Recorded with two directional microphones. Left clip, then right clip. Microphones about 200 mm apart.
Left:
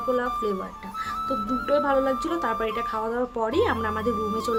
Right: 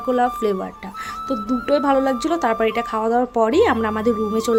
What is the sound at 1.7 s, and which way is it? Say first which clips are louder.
Speech: right 5 dB; 40° right (ahead or behind).